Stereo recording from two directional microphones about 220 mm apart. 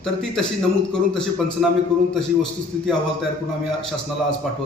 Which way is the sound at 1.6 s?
Centre (ahead or behind).